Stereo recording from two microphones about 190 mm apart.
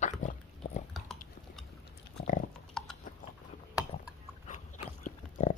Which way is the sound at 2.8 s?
5° left (ahead or behind).